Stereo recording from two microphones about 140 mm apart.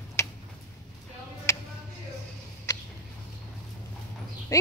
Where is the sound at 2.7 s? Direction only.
25° left (ahead or behind).